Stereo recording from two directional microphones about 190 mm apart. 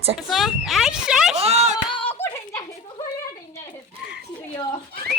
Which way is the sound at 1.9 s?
30° left (ahead or behind).